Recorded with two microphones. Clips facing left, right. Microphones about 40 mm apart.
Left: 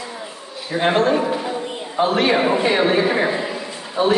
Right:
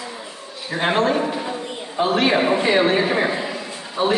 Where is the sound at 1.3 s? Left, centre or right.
Centre.